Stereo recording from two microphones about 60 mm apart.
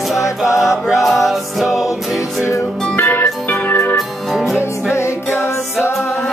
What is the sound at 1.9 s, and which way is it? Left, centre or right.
Music, left.